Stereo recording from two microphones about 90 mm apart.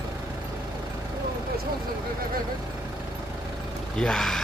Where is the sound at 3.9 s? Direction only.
5° left (ahead or behind).